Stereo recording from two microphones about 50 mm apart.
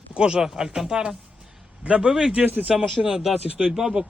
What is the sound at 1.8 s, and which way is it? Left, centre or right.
Speech, right.